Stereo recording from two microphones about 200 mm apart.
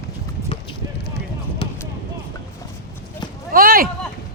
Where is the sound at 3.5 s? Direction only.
45° right (ahead or behind).